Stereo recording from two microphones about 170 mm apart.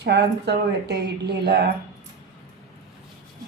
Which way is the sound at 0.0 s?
85° right.